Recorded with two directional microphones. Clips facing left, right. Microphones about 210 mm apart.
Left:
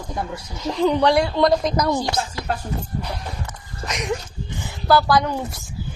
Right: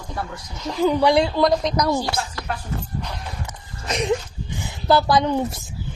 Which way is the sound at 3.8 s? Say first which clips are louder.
Right 4 dB; 30° right (ahead or behind).